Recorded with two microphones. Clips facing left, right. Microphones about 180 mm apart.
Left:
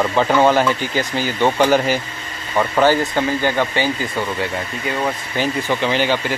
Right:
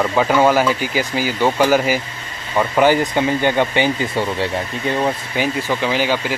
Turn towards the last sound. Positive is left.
turn(degrees=-5)  # may be behind; listen again after turning